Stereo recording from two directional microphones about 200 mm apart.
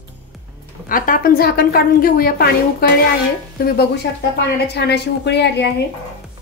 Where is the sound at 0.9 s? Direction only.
45° left (ahead or behind).